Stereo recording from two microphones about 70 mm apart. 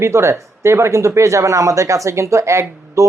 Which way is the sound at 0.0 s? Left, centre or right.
Right.